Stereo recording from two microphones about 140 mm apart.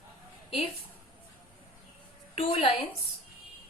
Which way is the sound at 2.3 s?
45° left (ahead or behind).